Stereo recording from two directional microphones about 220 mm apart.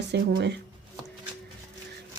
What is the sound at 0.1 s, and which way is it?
Speech, 50° right (ahead or behind).